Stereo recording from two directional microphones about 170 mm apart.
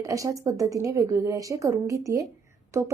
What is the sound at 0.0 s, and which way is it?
A woman's voice, 20° right (ahead or behind).